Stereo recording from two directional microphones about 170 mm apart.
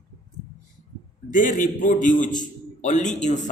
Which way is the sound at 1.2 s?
50° left (ahead or behind).